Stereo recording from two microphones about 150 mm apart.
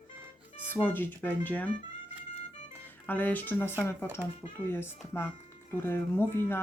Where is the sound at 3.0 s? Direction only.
10° left (ahead or behind).